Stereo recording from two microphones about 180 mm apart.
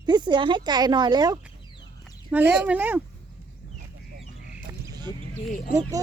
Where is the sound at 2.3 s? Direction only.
10° right (ahead or behind).